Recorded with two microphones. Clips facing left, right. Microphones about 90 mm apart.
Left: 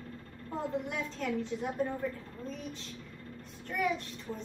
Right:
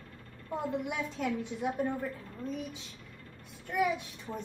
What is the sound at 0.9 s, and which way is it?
A woman's voice, 10° right (ahead or behind).